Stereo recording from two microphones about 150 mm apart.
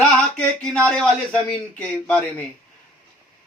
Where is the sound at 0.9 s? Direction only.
10° left (ahead or behind).